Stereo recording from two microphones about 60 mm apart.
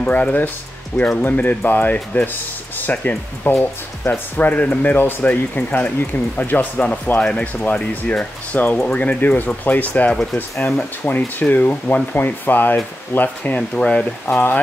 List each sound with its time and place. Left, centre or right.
0.0 s speech: left
13.6 s speech: centre
14.2 s speech: left